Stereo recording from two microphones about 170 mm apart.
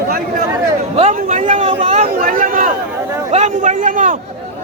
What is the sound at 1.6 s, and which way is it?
Speech, 30° right (ahead or behind).